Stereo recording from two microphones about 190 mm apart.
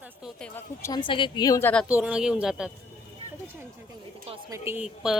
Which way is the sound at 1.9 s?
5° right (ahead or behind).